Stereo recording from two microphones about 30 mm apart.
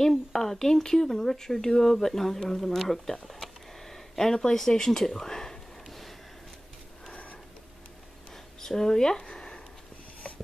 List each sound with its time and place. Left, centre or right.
0.3 s speech: centre
5.9 s a sound: centre
8.5 s speech: centre